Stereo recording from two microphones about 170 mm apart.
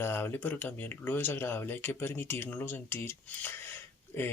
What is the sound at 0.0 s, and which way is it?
Speech, 15° left (ahead or behind).